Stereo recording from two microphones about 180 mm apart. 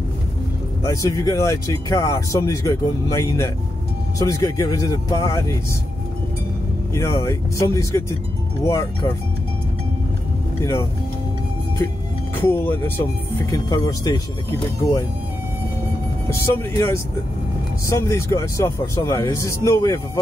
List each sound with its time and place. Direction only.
0.8 s speech: 15° left (ahead or behind)
6.9 s speech: 15° left (ahead or behind)
10.6 s speech: 15° left (ahead or behind)
12.4 s speech: 10° left (ahead or behind)
16.3 s speech: 15° left (ahead or behind)